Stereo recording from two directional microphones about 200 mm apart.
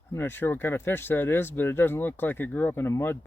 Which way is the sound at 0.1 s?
10° left (ahead or behind).